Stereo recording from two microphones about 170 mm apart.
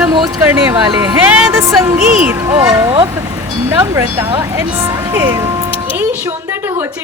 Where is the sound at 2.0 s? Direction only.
5° right (ahead or behind).